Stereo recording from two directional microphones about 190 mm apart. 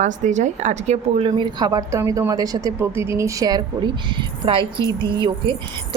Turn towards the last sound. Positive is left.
turn(degrees=-25)  # may be behind; listen again after turning